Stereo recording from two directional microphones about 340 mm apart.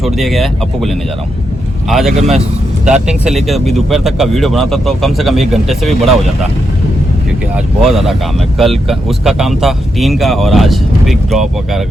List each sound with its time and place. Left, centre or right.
0.0 s speech: centre
2.1 s a man's voice: centre
2.8 s speech: centre
7.5 s speech: centre